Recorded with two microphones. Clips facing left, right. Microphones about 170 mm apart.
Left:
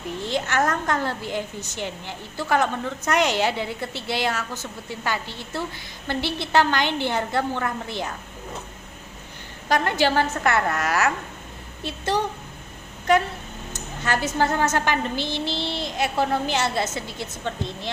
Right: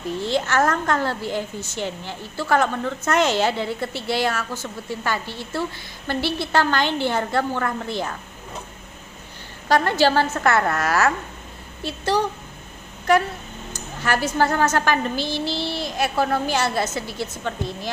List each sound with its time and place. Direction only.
0.2 s a woman's voice: 15° left (ahead or behind)
9.8 s a woman's voice: 15° left (ahead or behind)
10.3 s a woman's voice: 40° right (ahead or behind)
11.8 s a woman's voice: 20° left (ahead or behind)
14.0 s a woman's voice: 20° left (ahead or behind)